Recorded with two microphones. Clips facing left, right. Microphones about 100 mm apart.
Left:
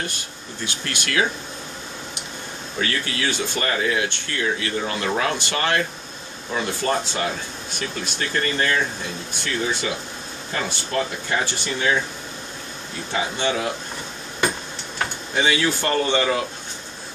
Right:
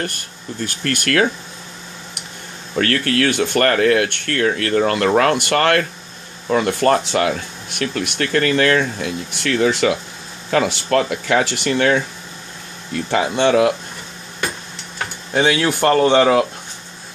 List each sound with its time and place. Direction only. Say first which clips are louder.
0.0 s speech: right 4 dB; 50° right (ahead or behind)
2.8 s speech: right 8 dB; 60° right (ahead or behind); by 12.0 s 75° right (ahead or behind)
13.1 s speech: right 8 dB; 75° right (ahead or behind)
15.4 s speech: right 6 dB; 55° right (ahead or behind)